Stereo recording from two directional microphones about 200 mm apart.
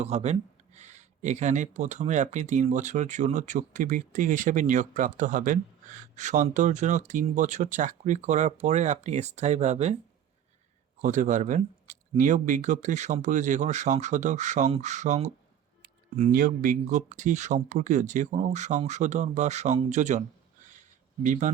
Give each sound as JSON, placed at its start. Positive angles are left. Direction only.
{"t": 0.0, "sound": "speech", "side_deg": -35}
{"t": 11.0, "sound": "speech", "side_deg": -40}
{"t": 21.2, "sound": "speech", "side_deg": -40}